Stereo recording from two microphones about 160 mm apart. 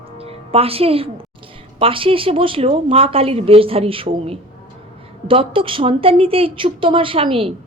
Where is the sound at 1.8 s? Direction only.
35° right (ahead or behind).